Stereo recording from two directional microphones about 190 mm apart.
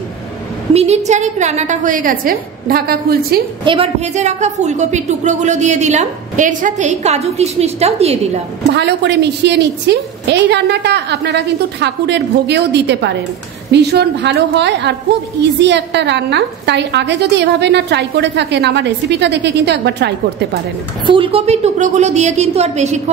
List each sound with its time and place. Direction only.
0.7 s a woman's voice: 35° right (ahead or behind); by 3.3 s 55° right (ahead or behind)
3.6 s a woman's voice: 30° right (ahead or behind)
8.7 s a woman's voice: 65° right (ahead or behind)
21.0 s a woman's voice: 25° right (ahead or behind)